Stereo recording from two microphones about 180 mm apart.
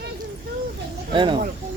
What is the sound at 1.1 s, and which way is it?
Speech, 25° right (ahead or behind).